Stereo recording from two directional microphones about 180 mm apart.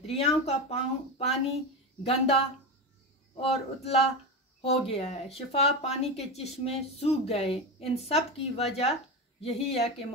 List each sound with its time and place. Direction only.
0.0 s speech: 35° left (ahead or behind)